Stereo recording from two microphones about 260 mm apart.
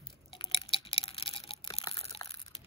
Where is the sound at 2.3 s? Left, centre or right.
Left.